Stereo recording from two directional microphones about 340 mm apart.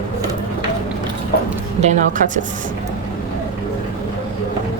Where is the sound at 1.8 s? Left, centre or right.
Right.